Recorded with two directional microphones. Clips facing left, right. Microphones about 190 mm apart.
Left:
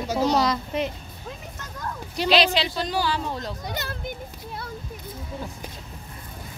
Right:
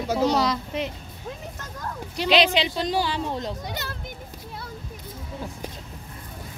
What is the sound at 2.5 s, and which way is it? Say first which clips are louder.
A woman's voice: right 2 dB; 20° right (ahead or behind).